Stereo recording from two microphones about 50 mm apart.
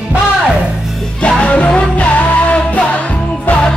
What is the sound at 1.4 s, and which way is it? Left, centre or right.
Music, left.